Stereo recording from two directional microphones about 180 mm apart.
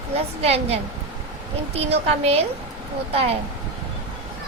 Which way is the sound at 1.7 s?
35° right (ahead or behind).